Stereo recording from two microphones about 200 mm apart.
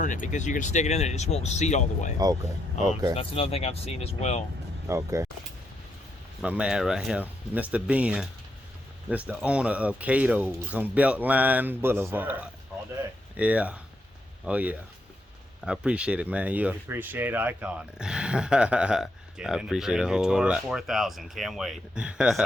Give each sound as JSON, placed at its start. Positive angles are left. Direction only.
{"t": 0.0, "sound": "speech", "side_deg": 40}
{"t": 2.1, "sound": "speech", "side_deg": -20}
{"t": 3.2, "sound": "speech", "side_deg": 30}
{"t": 4.9, "sound": "speech", "side_deg": -15}
{"t": 6.4, "sound": "speech", "side_deg": -5}